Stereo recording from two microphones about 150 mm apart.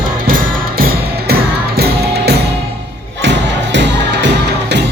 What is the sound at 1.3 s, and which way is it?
Music, 90° right.